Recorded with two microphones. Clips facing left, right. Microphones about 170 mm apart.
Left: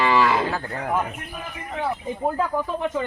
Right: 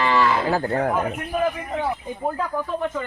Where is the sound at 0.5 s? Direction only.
35° right (ahead or behind).